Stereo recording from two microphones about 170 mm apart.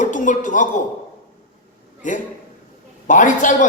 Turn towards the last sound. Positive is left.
turn(degrees=50)  # may be behind; listen again after turning